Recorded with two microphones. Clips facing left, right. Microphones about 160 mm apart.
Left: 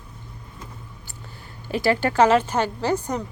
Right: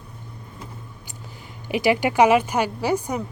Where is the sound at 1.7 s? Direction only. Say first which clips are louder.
Right 1 dB; 15° right (ahead or behind).